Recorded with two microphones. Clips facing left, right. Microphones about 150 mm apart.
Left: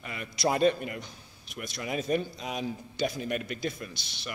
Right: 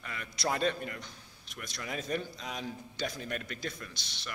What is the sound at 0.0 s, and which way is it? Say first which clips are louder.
A man's voice: left 6 dB; 15° left (ahead or behind).